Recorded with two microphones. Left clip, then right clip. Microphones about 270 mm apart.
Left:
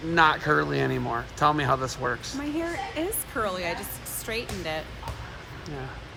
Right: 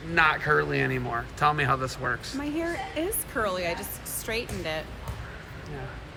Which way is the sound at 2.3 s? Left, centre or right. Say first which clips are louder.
Even; centre.